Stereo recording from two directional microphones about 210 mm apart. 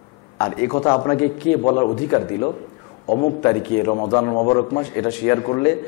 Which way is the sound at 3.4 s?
15° left (ahead or behind).